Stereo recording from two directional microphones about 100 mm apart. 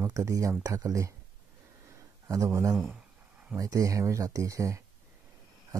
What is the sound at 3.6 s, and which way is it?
Speech, 35° right (ahead or behind).